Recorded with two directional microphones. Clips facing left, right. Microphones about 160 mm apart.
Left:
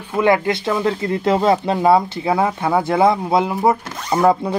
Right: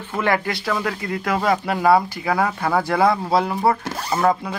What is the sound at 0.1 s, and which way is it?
Speech, 20° left (ahead or behind).